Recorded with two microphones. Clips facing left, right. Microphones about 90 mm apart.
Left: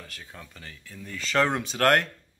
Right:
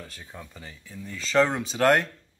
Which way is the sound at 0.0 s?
15° right (ahead or behind).